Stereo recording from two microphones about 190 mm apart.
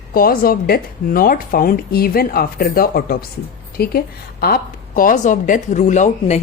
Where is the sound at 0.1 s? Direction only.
50° left (ahead or behind).